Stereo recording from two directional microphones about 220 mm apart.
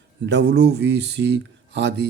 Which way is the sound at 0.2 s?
50° right (ahead or behind).